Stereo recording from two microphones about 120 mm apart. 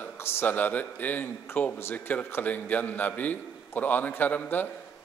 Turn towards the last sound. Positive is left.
turn(degrees=15)  # may be behind; listen again after turning